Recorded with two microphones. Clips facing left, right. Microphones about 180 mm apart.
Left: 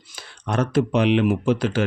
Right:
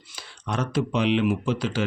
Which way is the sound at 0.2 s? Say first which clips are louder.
Left 5 dB; 55° left (ahead or behind).